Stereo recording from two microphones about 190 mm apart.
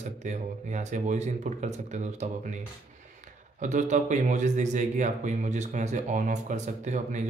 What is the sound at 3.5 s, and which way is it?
Speech, 40° right (ahead or behind).